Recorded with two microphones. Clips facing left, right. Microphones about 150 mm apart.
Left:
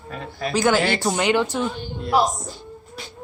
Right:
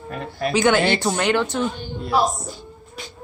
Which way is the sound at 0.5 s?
5° left (ahead or behind).